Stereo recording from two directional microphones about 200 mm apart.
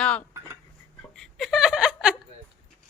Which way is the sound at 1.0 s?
Centre (ahead or behind).